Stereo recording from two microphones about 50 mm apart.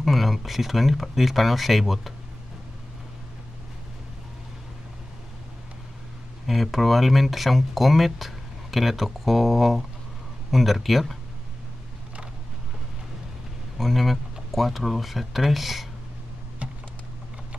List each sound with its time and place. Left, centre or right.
0.0 s speech: centre
6.4 s speech: centre
13.7 s speech: centre